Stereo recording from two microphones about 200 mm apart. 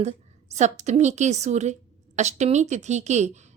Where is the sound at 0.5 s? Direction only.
35° right (ahead or behind).